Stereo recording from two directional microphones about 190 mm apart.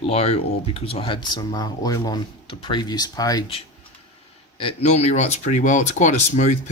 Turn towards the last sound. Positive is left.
turn(degrees=40)  # may be behind; listen again after turning